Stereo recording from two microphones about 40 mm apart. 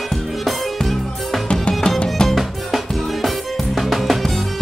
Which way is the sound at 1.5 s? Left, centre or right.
Left.